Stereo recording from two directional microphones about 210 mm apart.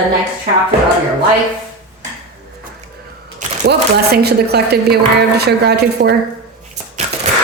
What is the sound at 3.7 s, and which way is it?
Speech, 50° right (ahead or behind).